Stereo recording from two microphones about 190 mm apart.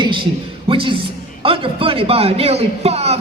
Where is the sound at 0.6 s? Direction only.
25° right (ahead or behind).